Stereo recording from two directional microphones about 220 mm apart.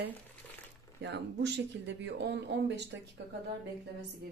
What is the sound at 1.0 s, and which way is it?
A woman's voice, 50° right (ahead or behind).